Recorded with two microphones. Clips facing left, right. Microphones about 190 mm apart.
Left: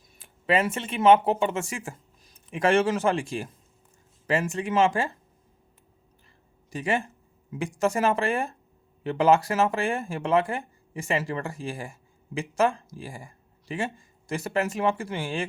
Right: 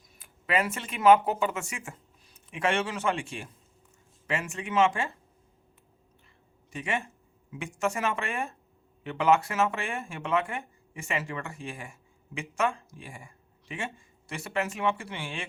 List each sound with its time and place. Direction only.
0.2 s speech: 30° left (ahead or behind)
6.7 s speech: 35° left (ahead or behind)